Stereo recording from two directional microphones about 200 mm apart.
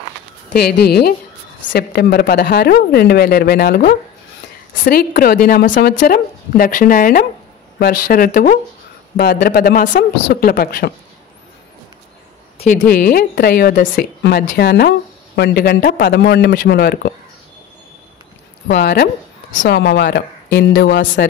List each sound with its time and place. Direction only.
0.5 s speech: 55° left (ahead or behind)
12.5 s speech: 40° left (ahead or behind)
19.5 s a woman's voice: 65° left (ahead or behind)